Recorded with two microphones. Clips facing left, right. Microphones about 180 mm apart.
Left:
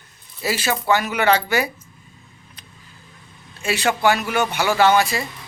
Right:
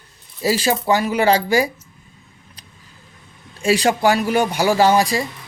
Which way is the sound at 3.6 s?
35° right (ahead or behind).